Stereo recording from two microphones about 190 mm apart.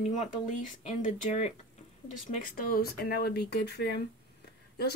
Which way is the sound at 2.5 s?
50° left (ahead or behind).